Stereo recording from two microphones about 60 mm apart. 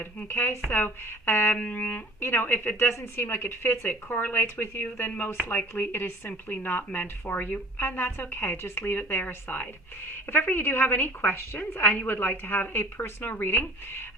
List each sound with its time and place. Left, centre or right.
0.0 s a woman's voice: left
1.5 s music: left
2.2 s a woman's voice: left
10.3 s a woman's voice: left